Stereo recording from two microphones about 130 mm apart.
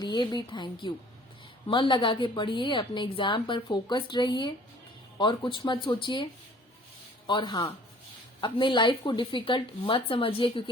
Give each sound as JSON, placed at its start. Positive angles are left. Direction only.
{"t": 0.0, "sound": "a woman's voice", "side_deg": 35}
{"t": 7.3, "sound": "a woman's voice", "side_deg": 35}